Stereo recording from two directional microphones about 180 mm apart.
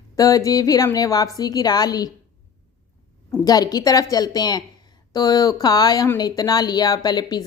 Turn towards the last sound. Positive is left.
turn(degrees=20)  # may be behind; listen again after turning